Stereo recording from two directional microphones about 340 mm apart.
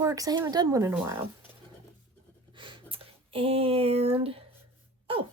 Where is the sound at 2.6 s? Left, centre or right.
Centre.